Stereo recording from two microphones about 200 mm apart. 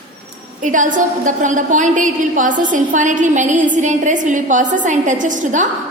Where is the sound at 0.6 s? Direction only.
40° right (ahead or behind).